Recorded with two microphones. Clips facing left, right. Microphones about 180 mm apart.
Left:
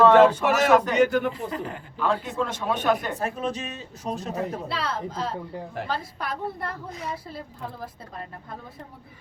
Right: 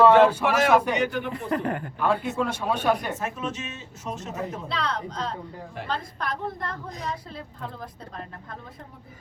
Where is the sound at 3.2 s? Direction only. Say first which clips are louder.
Left 3 dB; 35° left (ahead or behind).